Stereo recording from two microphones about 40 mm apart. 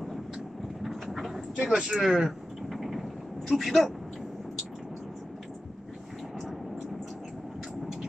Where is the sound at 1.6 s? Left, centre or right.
Centre.